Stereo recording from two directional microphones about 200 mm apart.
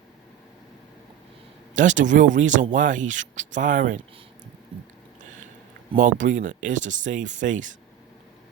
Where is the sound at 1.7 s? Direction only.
40° right (ahead or behind).